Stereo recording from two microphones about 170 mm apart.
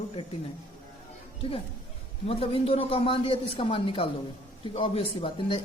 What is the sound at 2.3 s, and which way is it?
A woman's voice, 35° left (ahead or behind).